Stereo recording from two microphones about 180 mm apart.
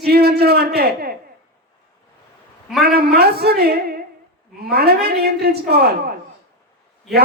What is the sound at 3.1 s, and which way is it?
A man's voice, 60° right (ahead or behind).